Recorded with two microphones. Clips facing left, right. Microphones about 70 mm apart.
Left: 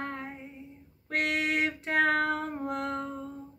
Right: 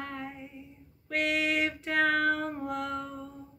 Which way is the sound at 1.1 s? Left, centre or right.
Left.